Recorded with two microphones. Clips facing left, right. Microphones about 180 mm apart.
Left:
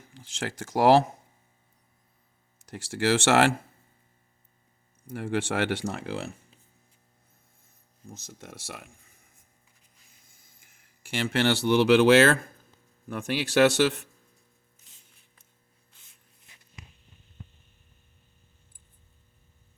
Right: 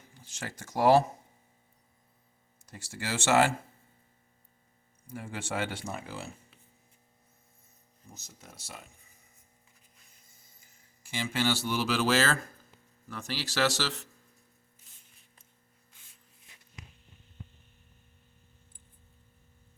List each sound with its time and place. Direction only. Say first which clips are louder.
0.1 s speech: left 7 dB; 90° left
2.6 s speech: left 12 dB; 90° left
5.0 s speech: left 10 dB; 75° left (ahead or behind)
8.4 s speech: left 5 dB; 85° left
11.0 s speech: left 5 dB; 70° left (ahead or behind)